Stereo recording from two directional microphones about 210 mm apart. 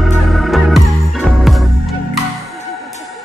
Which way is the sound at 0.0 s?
Centre (ahead or behind).